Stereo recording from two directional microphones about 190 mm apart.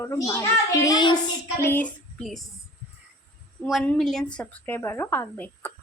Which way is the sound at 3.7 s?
5° left (ahead or behind).